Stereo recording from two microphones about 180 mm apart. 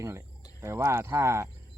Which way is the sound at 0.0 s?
15° right (ahead or behind).